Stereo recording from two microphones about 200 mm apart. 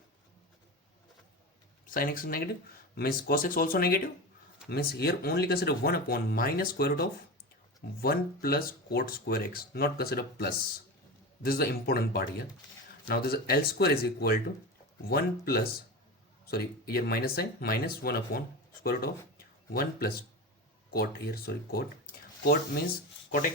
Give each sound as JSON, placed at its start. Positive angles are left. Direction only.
{"t": 1.9, "sound": "speech", "side_deg": 45}